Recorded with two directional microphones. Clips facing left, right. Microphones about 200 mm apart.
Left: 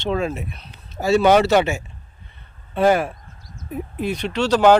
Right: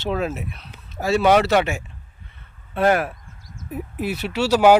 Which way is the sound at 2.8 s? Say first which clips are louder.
Left 2 dB; centre (ahead or behind).